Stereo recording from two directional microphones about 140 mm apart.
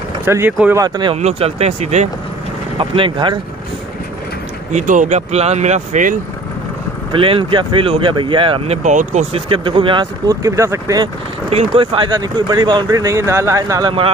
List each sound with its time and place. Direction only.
0.2 s speech: 15° right (ahead or behind)
0.7 s speech: 30° right (ahead or behind)
1.1 s speech: 50° right (ahead or behind)
2.8 s speech: 40° right (ahead or behind)
4.7 s speech: 65° right (ahead or behind)
7.1 s speech: 40° right (ahead or behind)
8.8 s speech: 55° right (ahead or behind)
9.5 s speech: 40° right (ahead or behind)
10.2 s speech: 25° right (ahead or behind)
11.5 s speech: 40° right (ahead or behind)